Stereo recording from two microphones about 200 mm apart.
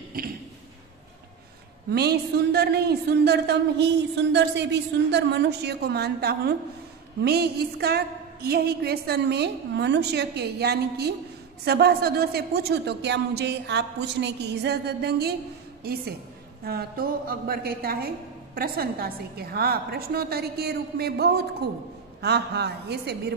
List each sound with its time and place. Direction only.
1.9 s a woman's voice: 55° right (ahead or behind)